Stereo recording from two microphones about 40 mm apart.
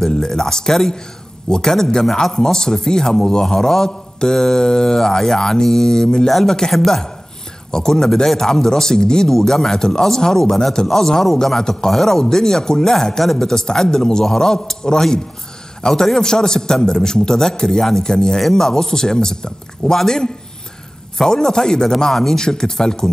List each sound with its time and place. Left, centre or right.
0.0 s a man's voice: centre